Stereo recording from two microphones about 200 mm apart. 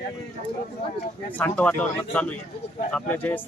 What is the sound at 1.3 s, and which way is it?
Speech, 10° left (ahead or behind).